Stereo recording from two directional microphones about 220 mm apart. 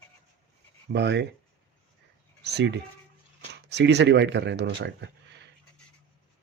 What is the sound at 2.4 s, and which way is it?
Speech, 50° right (ahead or behind).